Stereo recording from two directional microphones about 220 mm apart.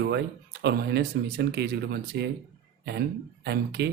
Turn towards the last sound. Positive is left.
turn(degrees=-50)  # may be behind; listen again after turning